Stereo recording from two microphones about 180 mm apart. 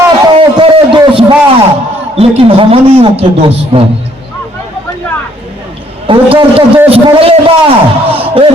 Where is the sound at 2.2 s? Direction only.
30° right (ahead or behind).